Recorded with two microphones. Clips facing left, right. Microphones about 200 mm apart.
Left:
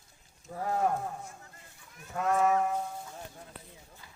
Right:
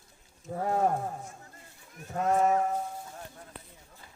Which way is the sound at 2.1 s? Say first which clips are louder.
Right 1 dB; 35° right (ahead or behind).